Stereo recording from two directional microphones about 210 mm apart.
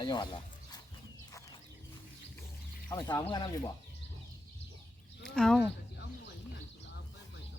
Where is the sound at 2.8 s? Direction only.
20° left (ahead or behind).